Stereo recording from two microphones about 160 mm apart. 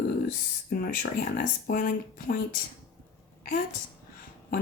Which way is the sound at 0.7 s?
70° left (ahead or behind).